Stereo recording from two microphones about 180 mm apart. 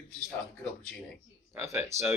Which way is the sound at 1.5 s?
15° right (ahead or behind).